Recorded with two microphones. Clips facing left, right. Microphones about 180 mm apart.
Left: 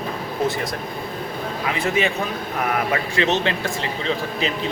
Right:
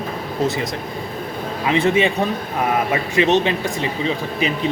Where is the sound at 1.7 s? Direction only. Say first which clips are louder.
Right 6 dB; 30° right (ahead or behind).